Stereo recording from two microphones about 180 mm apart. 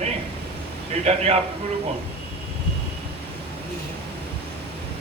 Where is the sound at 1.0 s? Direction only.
35° right (ahead or behind).